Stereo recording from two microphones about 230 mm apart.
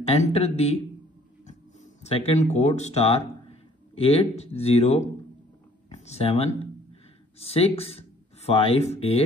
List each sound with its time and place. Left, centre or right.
0.0 s speech: left
2.0 s speech: left